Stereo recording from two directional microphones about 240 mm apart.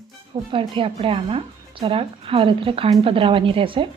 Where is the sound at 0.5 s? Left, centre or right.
Right.